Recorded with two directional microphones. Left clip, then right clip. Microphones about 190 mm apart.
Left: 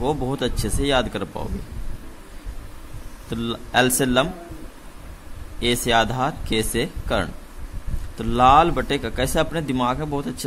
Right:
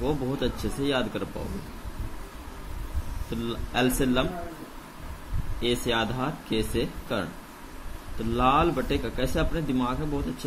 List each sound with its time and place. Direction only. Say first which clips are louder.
0.0 s speech: left 5 dB; 50° left (ahead or behind)
3.3 s speech: left 5 dB; 50° left (ahead or behind)
5.6 s speech: left 7 dB; 50° left (ahead or behind)